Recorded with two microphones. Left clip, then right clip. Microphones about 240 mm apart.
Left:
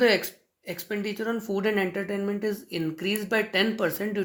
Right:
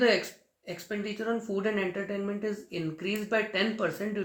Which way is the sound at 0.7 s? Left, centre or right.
Left.